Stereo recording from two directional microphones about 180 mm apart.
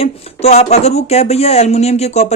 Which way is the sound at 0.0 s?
35° left (ahead or behind).